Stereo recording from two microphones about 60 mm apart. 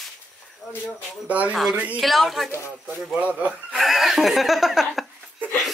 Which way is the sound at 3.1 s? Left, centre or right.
Right.